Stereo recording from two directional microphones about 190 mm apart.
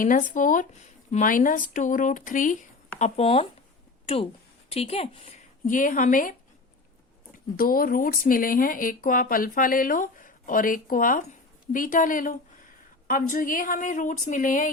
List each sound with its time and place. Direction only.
0.0 s a woman's voice: 45° left (ahead or behind)
3.0 s speech: 30° left (ahead or behind)
5.6 s a woman's voice: 45° left (ahead or behind)
7.5 s a woman's voice: 50° left (ahead or behind)